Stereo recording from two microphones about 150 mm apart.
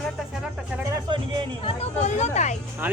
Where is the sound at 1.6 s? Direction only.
40° left (ahead or behind).